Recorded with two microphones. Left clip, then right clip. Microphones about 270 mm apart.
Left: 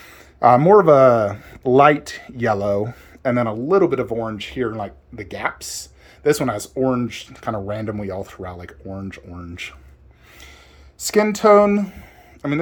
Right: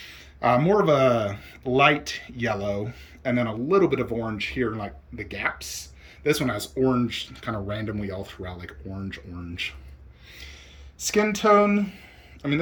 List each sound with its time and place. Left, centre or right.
0.0 s speech: left
11.0 s speech: centre